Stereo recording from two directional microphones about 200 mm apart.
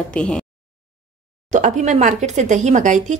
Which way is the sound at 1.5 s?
40° right (ahead or behind).